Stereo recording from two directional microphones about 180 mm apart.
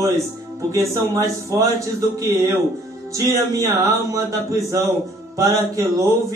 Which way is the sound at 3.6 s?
15° right (ahead or behind).